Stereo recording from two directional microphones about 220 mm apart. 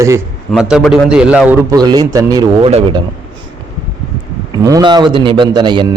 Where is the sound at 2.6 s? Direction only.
25° right (ahead or behind).